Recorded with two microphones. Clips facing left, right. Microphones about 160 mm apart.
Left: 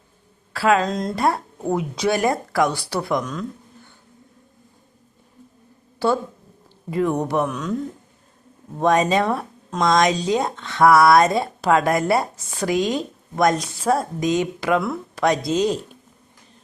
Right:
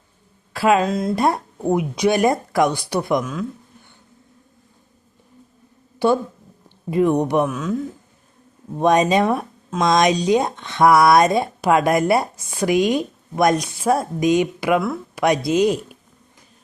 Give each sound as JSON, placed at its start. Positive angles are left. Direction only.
{"t": 0.5, "sound": "speech", "side_deg": -20}
{"t": 0.9, "sound": "speech", "side_deg": -5}
{"t": 1.1, "sound": "speech", "side_deg": -20}
{"t": 6.0, "sound": "speech", "side_deg": -15}
{"t": 7.4, "sound": "speech", "side_deg": -5}
{"t": 8.8, "sound": "speech", "side_deg": -20}